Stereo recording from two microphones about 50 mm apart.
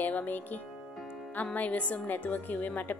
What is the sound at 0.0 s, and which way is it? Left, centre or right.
Music, left.